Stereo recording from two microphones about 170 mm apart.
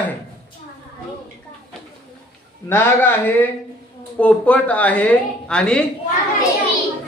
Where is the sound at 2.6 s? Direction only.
15° left (ahead or behind).